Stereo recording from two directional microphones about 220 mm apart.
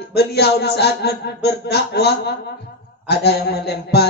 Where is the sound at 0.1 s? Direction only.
45° left (ahead or behind).